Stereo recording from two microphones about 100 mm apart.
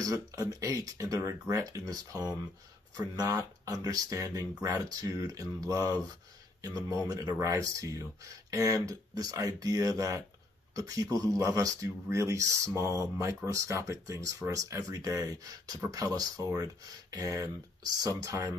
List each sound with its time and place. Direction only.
0.0 s speech: 35° right (ahead or behind)